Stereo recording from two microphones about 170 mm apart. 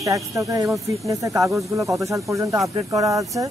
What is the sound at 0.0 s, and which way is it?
Speech, 20° right (ahead or behind).